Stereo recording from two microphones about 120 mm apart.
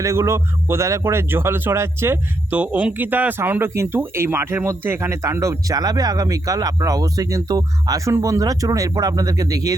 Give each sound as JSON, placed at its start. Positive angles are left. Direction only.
{"t": 0.0, "sound": "a man's voice", "side_deg": -25}